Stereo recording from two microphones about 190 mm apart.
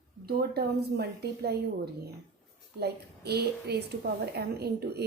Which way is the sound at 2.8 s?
60° right (ahead or behind).